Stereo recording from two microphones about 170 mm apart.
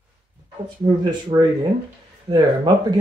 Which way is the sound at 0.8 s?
25° right (ahead or behind).